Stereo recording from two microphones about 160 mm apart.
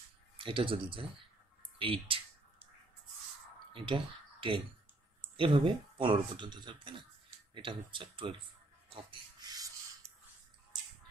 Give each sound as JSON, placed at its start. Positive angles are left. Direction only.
{"t": 0.4, "sound": "speech", "side_deg": -35}
{"t": 3.7, "sound": "speech", "side_deg": -30}
{"t": 8.9, "sound": "a sound", "side_deg": -25}
{"t": 10.0, "sound": "music", "side_deg": -15}